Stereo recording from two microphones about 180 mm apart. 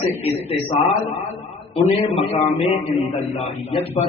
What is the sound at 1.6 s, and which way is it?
A man's voice, 30° left (ahead or behind).